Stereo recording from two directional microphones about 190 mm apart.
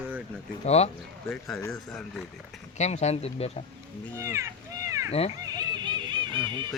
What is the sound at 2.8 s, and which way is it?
Speech, 35° left (ahead or behind).